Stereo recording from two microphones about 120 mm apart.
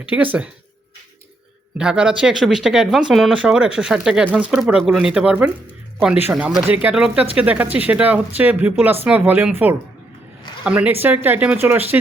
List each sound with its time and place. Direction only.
0.1 s speech: 15° right (ahead or behind)
1.8 s speech: 10° right (ahead or behind)